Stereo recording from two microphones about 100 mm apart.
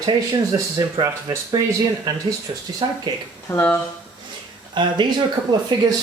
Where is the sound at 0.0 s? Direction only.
40° right (ahead or behind).